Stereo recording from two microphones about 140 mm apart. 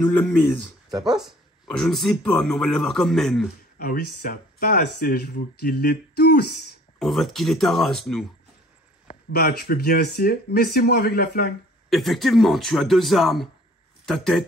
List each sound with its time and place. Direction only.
0.0 s speech: 15° left (ahead or behind)
0.9 s speech: 30° right (ahead or behind)
1.7 s a man's voice: 5° left (ahead or behind)
3.7 s speech: 90° left
7.0 s a man's voice: centre (ahead or behind)
9.4 s speech: 90° left
11.9 s a man's voice: centre (ahead or behind)